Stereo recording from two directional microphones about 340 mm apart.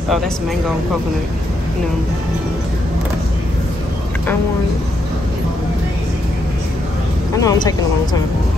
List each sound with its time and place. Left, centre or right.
7.4 s speech: centre